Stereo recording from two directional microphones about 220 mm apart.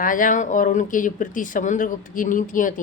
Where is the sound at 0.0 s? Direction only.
35° left (ahead or behind).